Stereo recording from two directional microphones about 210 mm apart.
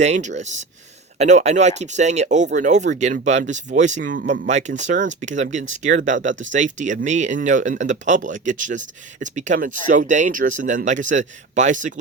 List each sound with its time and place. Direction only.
0.0 s speech: 35° right (ahead or behind)